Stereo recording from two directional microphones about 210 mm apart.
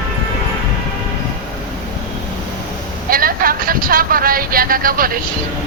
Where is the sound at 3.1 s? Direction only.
45° right (ahead or behind).